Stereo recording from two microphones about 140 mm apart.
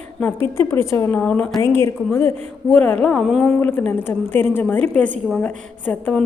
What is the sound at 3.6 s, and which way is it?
A woman's voice, 15° left (ahead or behind).